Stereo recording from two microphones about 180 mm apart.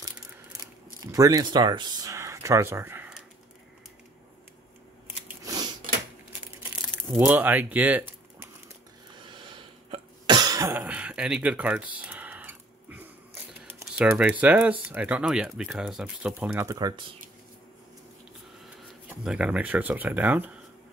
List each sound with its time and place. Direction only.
0.0 s a sound: 20° right (ahead or behind)
1.0 s speech: 20° right (ahead or behind)
5.0 s scissors: 20° right (ahead or behind)
6.6 s a sound: 15° right (ahead or behind)
7.1 s speech: 10° right (ahead or behind)
9.3 s cough: 25° right (ahead or behind); by 16.6 s 5° right (ahead or behind)
16.6 s speech: 20° right (ahead or behind)
19.0 s speech: 5° right (ahead or behind)